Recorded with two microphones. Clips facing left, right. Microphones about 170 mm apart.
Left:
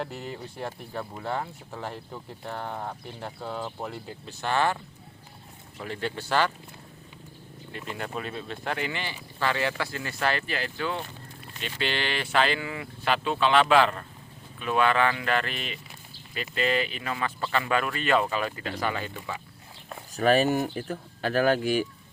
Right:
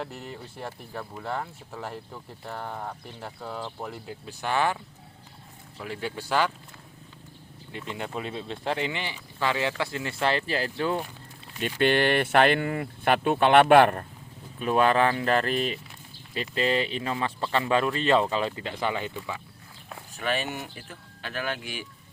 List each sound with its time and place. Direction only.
0.0 s speech: centre (ahead or behind)
5.8 s speech: 5° right (ahead or behind)
7.9 s speech: 20° right (ahead or behind)
11.8 s speech: 55° right (ahead or behind)
14.6 s speech: 40° right (ahead or behind); by 19.1 s 20° right (ahead or behind)
20.1 s speech: 40° left (ahead or behind)